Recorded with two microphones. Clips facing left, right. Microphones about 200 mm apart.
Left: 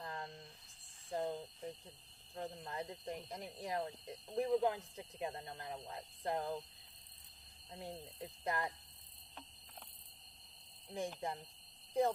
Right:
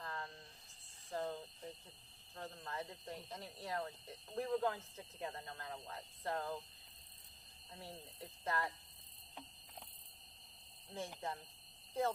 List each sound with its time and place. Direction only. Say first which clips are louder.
0.0 s a sound: left 1 dB; 20° left (ahead or behind)
1.1 s cricket: left 3 dB; 15° left (ahead or behind)
2.3 s speech: left 3 dB; 15° left (ahead or behind)
7.7 s speech: left 5 dB; 20° left (ahead or behind)
11.2 s speech: left 2 dB; 15° left (ahead or behind)